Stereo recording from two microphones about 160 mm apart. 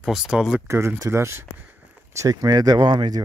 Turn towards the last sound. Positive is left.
turn(degrees=-25)  # may be behind; listen again after turning